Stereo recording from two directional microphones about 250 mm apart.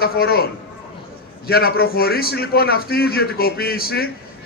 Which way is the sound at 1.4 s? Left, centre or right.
Left.